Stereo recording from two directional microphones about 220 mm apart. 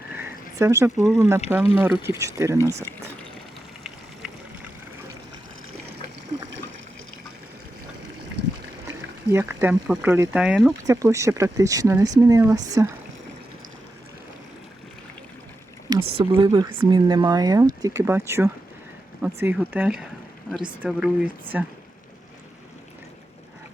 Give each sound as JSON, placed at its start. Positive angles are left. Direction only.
{"t": 0.2, "sound": "a sound", "side_deg": -10}
{"t": 1.0, "sound": "speech", "side_deg": -10}
{"t": 2.9, "sound": "a sound", "side_deg": 10}
{"t": 3.8, "sound": "vehicle", "side_deg": -5}
{"t": 9.3, "sound": "speech", "side_deg": -10}
{"t": 10.8, "sound": "speech", "side_deg": -15}
{"t": 15.9, "sound": "speech", "side_deg": -25}
{"t": 20.5, "sound": "speech", "side_deg": 5}
{"t": 20.8, "sound": "speech", "side_deg": -5}